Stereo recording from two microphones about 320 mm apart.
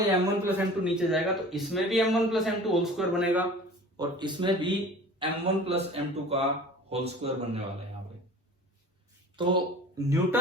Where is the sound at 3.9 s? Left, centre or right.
Centre.